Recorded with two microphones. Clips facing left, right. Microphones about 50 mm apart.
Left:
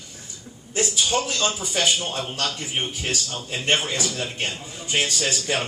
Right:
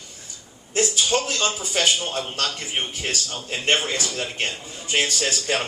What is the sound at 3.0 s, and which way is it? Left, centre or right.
Speech, right.